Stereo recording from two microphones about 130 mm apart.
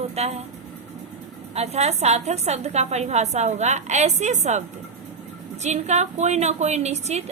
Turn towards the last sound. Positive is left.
turn(degrees=-60)  # may be behind; listen again after turning